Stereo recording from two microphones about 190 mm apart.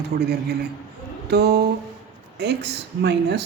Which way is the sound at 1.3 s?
60° right (ahead or behind).